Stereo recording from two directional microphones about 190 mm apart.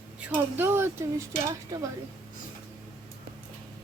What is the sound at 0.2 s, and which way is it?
Speech, 10° right (ahead or behind).